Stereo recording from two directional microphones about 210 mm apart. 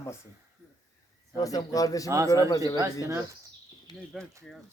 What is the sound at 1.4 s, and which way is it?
Speech, 15° left (ahead or behind).